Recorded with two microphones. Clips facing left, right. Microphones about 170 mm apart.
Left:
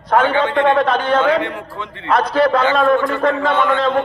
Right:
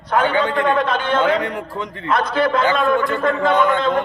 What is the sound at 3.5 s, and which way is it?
Speech, 40° right (ahead or behind).